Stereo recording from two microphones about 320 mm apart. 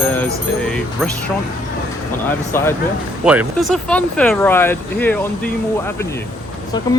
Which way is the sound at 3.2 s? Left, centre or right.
Centre.